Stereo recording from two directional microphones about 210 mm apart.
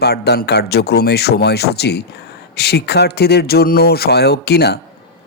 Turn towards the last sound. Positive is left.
turn(degrees=50)  # may be behind; listen again after turning